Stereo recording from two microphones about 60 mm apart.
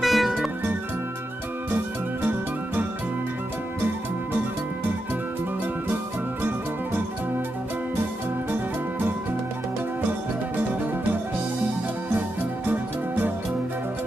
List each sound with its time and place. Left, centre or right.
0.0 s music: centre
12.6 s music: right